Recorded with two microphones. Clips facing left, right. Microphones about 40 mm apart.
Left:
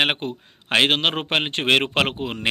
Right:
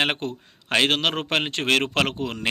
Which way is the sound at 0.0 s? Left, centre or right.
Centre.